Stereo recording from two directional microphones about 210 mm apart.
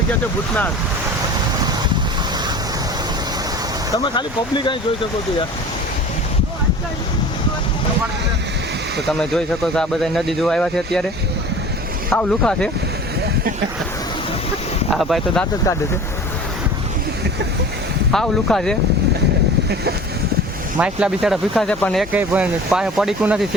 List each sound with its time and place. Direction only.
3.9 s speech: 20° left (ahead or behind)
9.0 s speech: centre (ahead or behind)
12.1 s speech: 5° left (ahead or behind)
14.9 s speech: centre (ahead or behind)
18.1 s speech: centre (ahead or behind)
20.7 s speech: 5° right (ahead or behind)
22.1 s speech: 5° right (ahead or behind)